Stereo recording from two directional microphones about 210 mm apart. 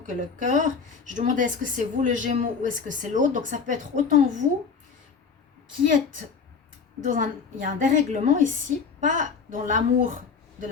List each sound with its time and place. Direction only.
0.0 s a woman's voice: 35° right (ahead or behind)
7.0 s a woman's voice: 40° right (ahead or behind)